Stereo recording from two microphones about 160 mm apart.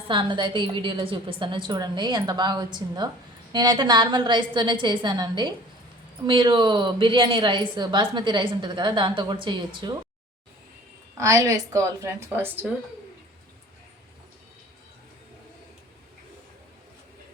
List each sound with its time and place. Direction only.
0.1 s a woman's voice: 30° right (ahead or behind)
11.2 s a woman's voice: 20° right (ahead or behind)